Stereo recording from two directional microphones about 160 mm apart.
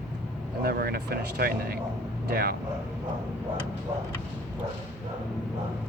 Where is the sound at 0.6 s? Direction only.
75° right (ahead or behind).